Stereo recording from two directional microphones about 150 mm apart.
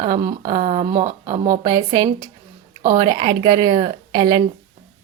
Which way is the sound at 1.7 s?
25° right (ahead or behind).